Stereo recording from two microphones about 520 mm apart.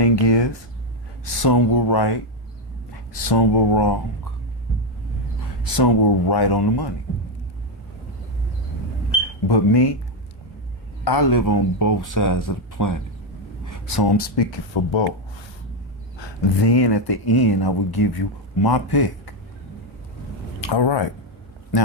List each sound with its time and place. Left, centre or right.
0.0 s a sound: left
1.2 s speech: left
3.2 s speech: left
5.7 s speech: left
9.5 s speech: left
11.0 s speech: left
16.1 s speech: left
20.7 s speech: left